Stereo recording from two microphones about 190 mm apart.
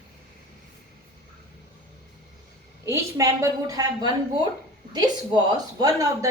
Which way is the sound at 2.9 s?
15° right (ahead or behind).